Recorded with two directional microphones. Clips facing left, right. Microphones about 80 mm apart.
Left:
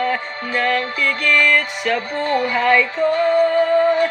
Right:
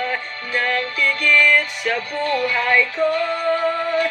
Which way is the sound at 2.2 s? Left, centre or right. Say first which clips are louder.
Left 1 dB; left.